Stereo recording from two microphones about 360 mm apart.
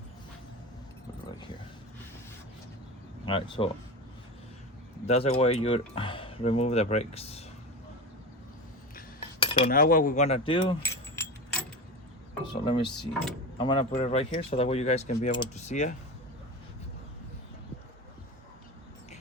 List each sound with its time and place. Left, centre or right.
3.2 s speech: centre
5.0 s speech: centre
9.0 s cutlery: centre
12.6 s speech: centre